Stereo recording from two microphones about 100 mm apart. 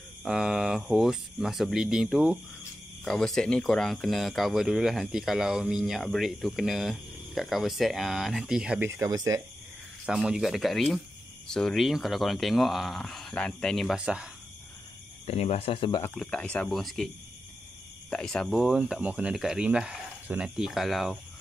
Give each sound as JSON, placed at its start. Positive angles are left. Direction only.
{"t": 0.2, "sound": "speech", "side_deg": -5}
{"t": 3.1, "sound": "speech", "side_deg": 5}
{"t": 8.8, "sound": "speech", "side_deg": -30}
{"t": 10.0, "sound": "speech", "side_deg": -10}
{"t": 14.0, "sound": "speech", "side_deg": -10}
{"t": 15.2, "sound": "speech", "side_deg": 90}
{"t": 16.2, "sound": "speech", "side_deg": 10}
{"t": 18.1, "sound": "speech", "side_deg": 10}
{"t": 18.6, "sound": "speech", "side_deg": -5}